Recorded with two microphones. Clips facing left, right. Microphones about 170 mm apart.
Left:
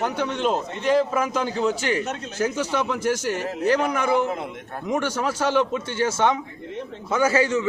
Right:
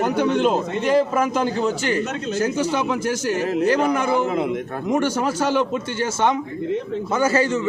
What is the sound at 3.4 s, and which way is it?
A man's voice, 90° right.